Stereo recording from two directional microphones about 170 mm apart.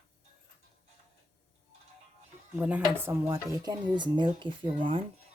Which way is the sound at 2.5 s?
10° right (ahead or behind).